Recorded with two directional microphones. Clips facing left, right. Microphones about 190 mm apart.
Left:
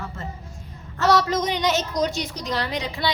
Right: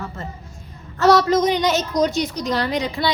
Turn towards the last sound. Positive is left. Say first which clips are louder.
# right 5 dB
turn(degrees=-45)  # may be behind; listen again after turning